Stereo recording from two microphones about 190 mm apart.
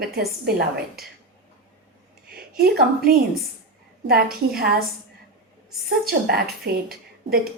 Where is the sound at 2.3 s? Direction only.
55° right (ahead or behind).